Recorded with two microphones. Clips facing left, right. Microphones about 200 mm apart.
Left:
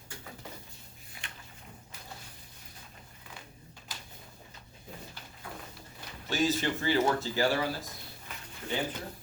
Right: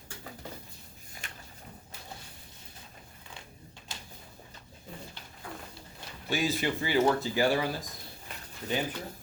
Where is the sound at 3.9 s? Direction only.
25° right (ahead or behind).